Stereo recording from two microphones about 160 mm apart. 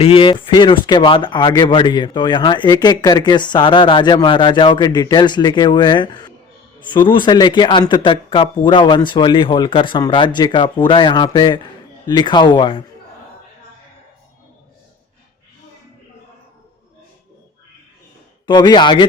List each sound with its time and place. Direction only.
0.0 s speech: 35° left (ahead or behind)
18.4 s speech: 25° left (ahead or behind)